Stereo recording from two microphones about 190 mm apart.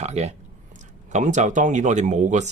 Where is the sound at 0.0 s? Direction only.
35° right (ahead or behind).